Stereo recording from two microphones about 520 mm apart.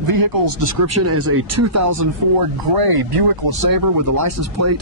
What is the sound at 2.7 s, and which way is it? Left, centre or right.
Speech, right.